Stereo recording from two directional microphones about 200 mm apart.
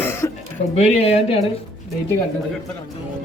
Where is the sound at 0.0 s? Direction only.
10° left (ahead or behind).